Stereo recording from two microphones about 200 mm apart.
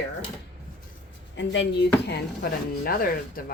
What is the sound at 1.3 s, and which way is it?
Speech, 65° left (ahead or behind).